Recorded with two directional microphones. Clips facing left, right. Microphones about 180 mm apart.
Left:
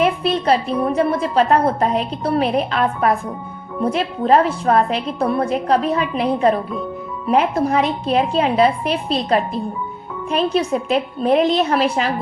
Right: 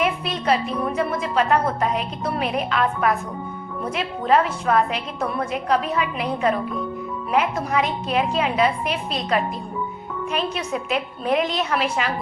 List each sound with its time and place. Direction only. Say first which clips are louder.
0.0 s a woman's voice: left 6 dB; 30° left (ahead or behind)